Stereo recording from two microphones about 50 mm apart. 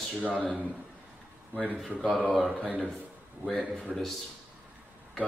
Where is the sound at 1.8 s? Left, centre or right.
Centre.